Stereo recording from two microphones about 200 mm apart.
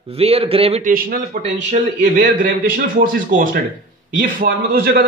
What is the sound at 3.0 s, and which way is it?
A man's voice, 45° right (ahead or behind).